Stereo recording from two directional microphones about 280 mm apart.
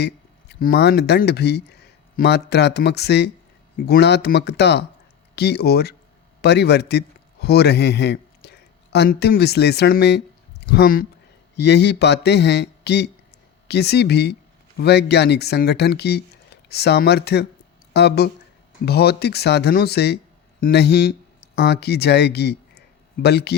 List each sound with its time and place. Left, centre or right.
0.0 s a man's voice: left